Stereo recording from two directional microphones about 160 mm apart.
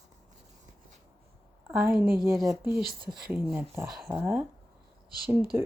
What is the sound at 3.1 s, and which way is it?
Speech, 5° right (ahead or behind).